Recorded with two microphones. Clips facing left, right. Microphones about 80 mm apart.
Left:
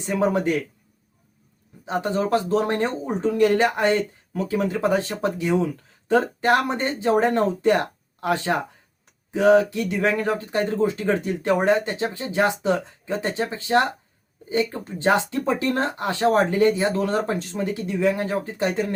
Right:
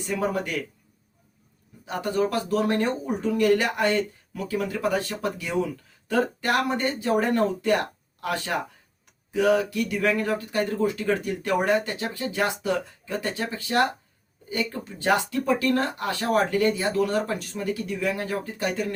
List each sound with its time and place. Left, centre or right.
0.0 s speech: left
1.8 s speech: left